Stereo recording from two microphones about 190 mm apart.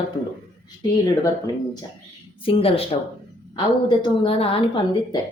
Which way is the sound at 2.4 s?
30° left (ahead or behind).